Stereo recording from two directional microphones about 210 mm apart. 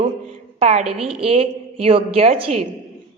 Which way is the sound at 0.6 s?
30° right (ahead or behind).